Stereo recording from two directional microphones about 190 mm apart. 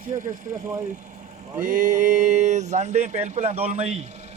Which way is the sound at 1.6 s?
45° right (ahead or behind).